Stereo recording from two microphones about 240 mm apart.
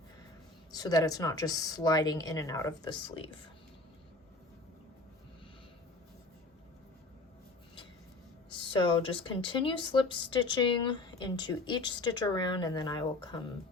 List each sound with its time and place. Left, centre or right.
0.7 s speech: centre
8.4 s speech: centre